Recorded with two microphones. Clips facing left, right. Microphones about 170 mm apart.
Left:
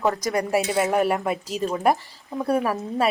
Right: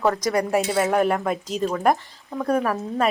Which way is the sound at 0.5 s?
10° left (ahead or behind).